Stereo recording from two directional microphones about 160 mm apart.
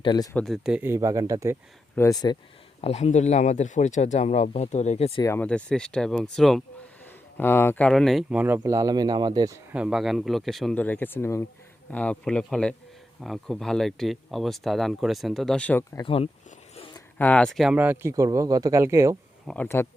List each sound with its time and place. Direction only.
0.0 s speech: 25° left (ahead or behind)
0.3 s speech: centre (ahead or behind)
0.8 s speech: 15° right (ahead or behind)
2.0 s speech: 20° left (ahead or behind)
2.8 s speech: 45° left (ahead or behind)
5.2 s speech: 15° left (ahead or behind); by 9.6 s 25° right (ahead or behind)
9.7 s speech: 5° right (ahead or behind)
16.0 s speech: 35° left (ahead or behind)
17.2 s speech: 10° left (ahead or behind)
17.7 s speech: 15° right (ahead or behind)
19.5 s speech: 10° left (ahead or behind)